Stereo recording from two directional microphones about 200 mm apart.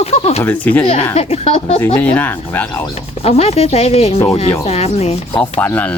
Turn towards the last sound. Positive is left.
turn(degrees=10)  # may be behind; listen again after turning